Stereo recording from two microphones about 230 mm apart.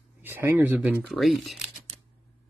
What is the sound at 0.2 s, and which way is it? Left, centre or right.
Speech, centre.